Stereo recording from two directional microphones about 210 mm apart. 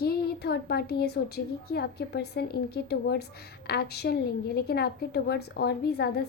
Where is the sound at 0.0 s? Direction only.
50° left (ahead or behind).